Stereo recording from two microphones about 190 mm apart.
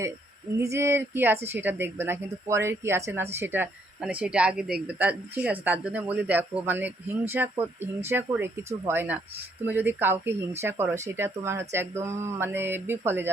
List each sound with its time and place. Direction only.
0.6 s speech: 15° right (ahead or behind)